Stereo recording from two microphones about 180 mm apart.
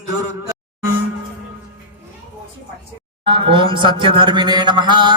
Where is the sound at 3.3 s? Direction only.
30° right (ahead or behind).